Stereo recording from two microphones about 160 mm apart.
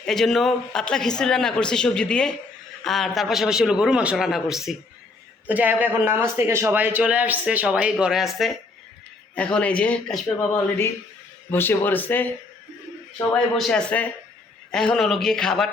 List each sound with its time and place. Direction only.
0.0 s a man's voice: 5° left (ahead or behind)
13.3 s a man's voice: 5° left (ahead or behind)